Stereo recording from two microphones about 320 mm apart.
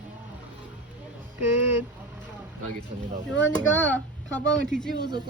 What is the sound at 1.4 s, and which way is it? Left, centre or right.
Speech, centre.